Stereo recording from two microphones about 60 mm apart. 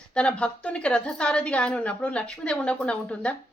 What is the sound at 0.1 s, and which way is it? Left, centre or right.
A woman's voice, centre.